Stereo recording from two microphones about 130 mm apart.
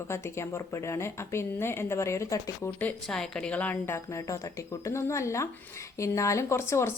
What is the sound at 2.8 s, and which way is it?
A woman's voice, 5° left (ahead or behind).